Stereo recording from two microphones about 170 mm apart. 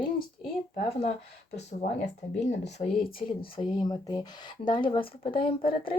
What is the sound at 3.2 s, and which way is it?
Speech, 25° left (ahead or behind).